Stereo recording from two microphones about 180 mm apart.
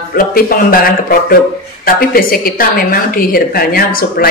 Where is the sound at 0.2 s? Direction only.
55° left (ahead or behind).